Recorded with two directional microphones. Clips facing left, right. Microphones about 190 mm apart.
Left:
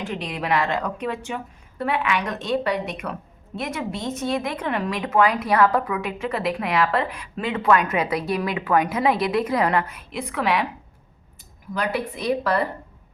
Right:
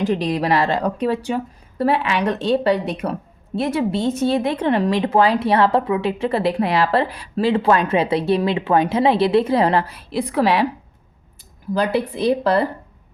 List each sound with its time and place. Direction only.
0.0 s a woman's voice: 35° right (ahead or behind)
11.7 s a woman's voice: 30° right (ahead or behind)